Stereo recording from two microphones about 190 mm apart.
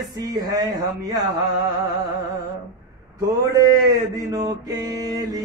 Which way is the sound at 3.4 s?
20° right (ahead or behind).